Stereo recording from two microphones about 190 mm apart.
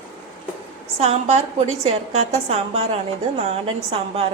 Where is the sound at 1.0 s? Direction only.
35° right (ahead or behind).